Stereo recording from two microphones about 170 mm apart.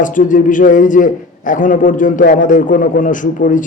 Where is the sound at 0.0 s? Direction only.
50° left (ahead or behind).